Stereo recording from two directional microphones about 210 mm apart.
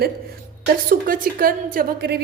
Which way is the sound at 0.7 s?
45° right (ahead or behind).